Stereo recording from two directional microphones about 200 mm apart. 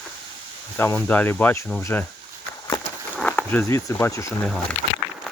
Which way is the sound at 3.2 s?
5° left (ahead or behind).